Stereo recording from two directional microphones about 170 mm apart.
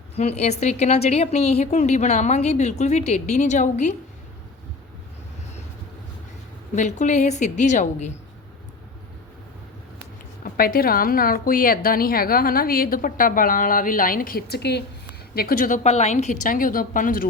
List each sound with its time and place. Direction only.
0.2 s a woman's voice: 40° left (ahead or behind)
6.7 s a woman's voice: 45° left (ahead or behind)
10.4 s a woman's voice: 60° left (ahead or behind); by 14.8 s 75° left (ahead or behind)
15.4 s a woman's voice: 60° left (ahead or behind)